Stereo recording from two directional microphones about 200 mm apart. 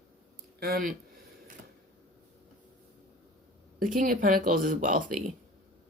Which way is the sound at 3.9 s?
45° right (ahead or behind).